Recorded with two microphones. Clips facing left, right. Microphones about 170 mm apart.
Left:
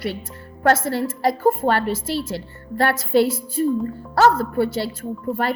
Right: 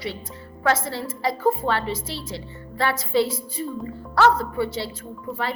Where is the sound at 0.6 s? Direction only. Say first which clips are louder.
Left 5 dB; 55° left (ahead or behind).